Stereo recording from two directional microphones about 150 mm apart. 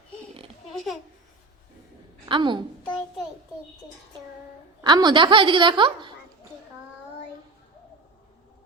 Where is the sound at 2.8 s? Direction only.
10° left (ahead or behind).